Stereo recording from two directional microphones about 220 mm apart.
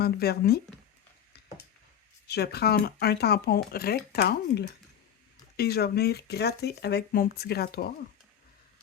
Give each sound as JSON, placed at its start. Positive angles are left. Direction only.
{"t": 0.0, "sound": "speech", "side_deg": 45}
{"t": 2.2, "sound": "speech", "side_deg": 45}